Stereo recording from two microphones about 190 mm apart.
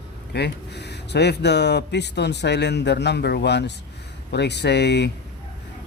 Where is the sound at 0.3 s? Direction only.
60° left (ahead or behind).